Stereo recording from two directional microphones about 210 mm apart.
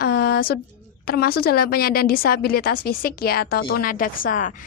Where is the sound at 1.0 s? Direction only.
45° left (ahead or behind).